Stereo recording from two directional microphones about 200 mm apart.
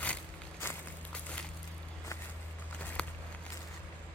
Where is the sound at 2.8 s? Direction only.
5° left (ahead or behind).